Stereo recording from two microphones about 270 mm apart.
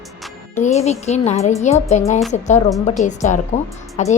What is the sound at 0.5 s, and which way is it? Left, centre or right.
A woman's voice, left.